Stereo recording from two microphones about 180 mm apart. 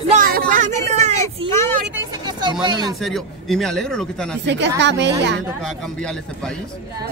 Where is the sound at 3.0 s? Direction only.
Centre (ahead or behind).